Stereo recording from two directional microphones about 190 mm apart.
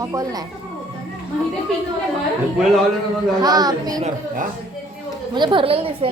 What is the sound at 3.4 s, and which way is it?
Speech, 20° right (ahead or behind).